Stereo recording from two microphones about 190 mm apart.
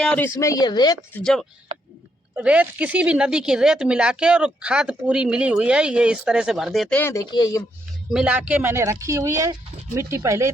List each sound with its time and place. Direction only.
0.0 s speech: 10° left (ahead or behind)
1.1 s speech: 5° left (ahead or behind)
7.0 s speech: 15° left (ahead or behind)
8.1 s speech: 5° right (ahead or behind)